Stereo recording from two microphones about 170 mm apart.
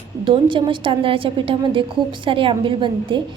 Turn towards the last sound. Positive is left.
turn(degrees=-30)  # may be behind; listen again after turning